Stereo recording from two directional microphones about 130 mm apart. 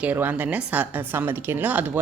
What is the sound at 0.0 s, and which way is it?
Speech, 15° right (ahead or behind).